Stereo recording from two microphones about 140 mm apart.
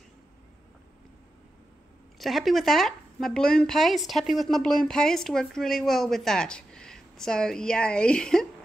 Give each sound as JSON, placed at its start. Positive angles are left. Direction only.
{"t": 2.1, "sound": "speech", "side_deg": 0}